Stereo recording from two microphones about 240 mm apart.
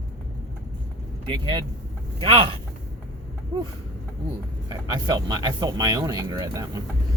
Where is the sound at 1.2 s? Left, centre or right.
Centre.